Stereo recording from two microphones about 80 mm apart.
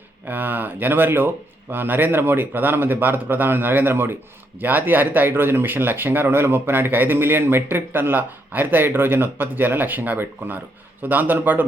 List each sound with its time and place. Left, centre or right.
0.3 s speech: right